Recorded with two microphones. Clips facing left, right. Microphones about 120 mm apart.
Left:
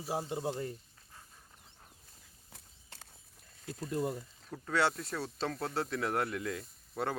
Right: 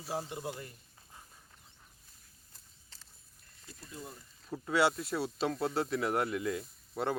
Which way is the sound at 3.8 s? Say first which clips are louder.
Left 13 dB; 80° left.